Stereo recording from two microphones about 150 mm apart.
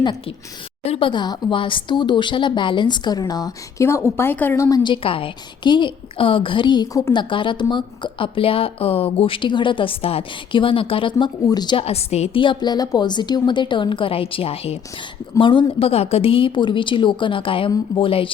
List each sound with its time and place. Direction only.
0.0 s speech: 30° left (ahead or behind)